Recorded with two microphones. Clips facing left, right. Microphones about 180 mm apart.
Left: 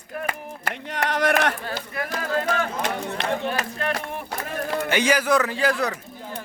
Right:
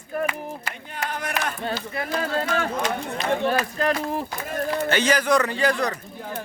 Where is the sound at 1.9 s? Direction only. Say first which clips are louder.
Left 2 dB; 30° right (ahead or behind).